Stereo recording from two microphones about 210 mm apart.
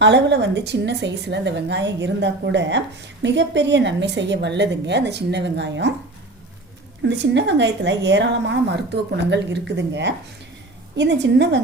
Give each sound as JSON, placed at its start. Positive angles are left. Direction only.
{"t": 0.0, "sound": "a woman's voice", "side_deg": -55}
{"t": 7.0, "sound": "a woman's voice", "side_deg": -55}